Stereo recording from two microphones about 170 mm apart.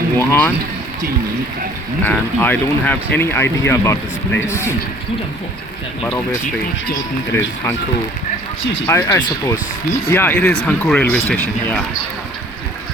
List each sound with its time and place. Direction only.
0.2 s speech: 15° left (ahead or behind)
2.0 s speech: 10° left (ahead or behind)
7.3 s speech: 15° left (ahead or behind)
8.9 s speech: 20° left (ahead or behind)